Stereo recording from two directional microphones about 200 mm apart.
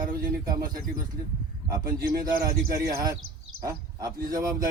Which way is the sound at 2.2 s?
15° right (ahead or behind).